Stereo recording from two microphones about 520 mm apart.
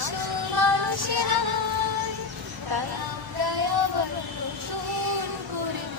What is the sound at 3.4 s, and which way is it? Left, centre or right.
Music, right.